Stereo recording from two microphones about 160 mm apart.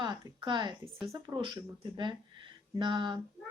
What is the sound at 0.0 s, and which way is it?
A woman's voice, 30° right (ahead or behind).